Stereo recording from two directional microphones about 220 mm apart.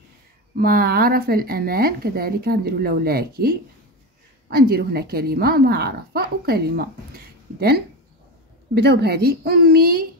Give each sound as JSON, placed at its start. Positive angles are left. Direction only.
{"t": 0.6, "sound": "speech", "side_deg": -40}
{"t": 7.2, "sound": "a sound", "side_deg": -45}
{"t": 8.7, "sound": "speech", "side_deg": -45}